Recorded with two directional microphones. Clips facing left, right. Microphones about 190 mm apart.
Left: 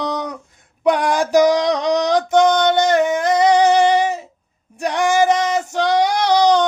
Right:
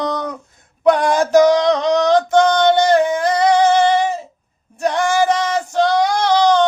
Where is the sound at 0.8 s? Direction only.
10° left (ahead or behind).